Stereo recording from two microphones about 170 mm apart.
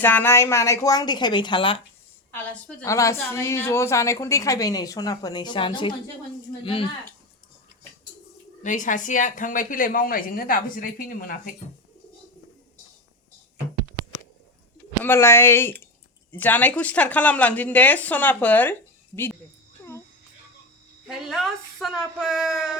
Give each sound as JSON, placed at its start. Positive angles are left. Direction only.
{"t": 0.0, "sound": "a woman's voice", "side_deg": 10}
{"t": 2.3, "sound": "a woman's voice", "side_deg": 15}
{"t": 8.6, "sound": "speech", "side_deg": 50}
{"t": 15.0, "sound": "speech", "side_deg": 15}
{"t": 21.1, "sound": "speech", "side_deg": 0}